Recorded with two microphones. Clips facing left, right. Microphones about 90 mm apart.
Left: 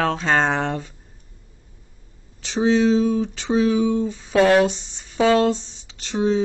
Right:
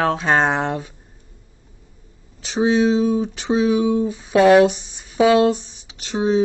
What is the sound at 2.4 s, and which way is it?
Speech, 15° right (ahead or behind).